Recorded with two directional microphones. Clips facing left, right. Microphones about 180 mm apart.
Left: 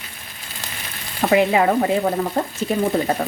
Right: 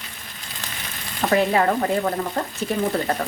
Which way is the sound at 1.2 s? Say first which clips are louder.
Left 3 dB; 15° left (ahead or behind).